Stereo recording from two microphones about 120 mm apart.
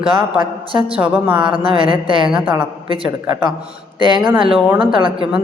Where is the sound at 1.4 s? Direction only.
45° right (ahead or behind).